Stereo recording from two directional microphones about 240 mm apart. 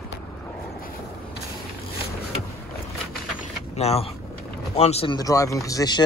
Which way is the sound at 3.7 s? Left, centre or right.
Left.